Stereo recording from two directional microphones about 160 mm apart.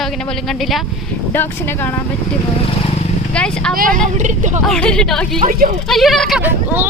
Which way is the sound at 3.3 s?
5° left (ahead or behind).